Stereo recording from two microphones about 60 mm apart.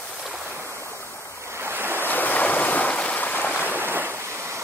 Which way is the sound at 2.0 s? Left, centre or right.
Left.